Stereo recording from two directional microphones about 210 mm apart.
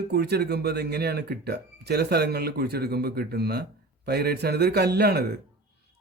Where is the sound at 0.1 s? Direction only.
50° right (ahead or behind).